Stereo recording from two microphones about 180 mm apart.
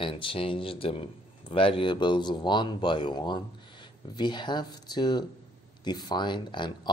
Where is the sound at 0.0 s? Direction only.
30° left (ahead or behind).